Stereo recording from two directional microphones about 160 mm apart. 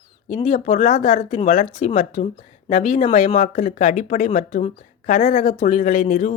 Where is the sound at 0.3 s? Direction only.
45° left (ahead or behind).